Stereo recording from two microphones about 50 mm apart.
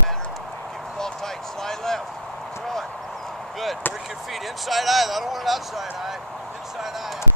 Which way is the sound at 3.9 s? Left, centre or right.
Left.